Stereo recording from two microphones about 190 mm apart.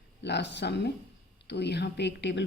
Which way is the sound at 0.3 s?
65° left (ahead or behind).